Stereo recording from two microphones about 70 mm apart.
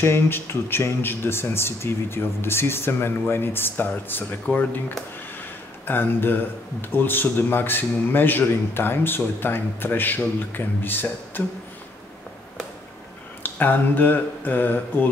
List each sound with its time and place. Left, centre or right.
0.0 s speech: left
5.9 s speech: left
13.4 s speech: left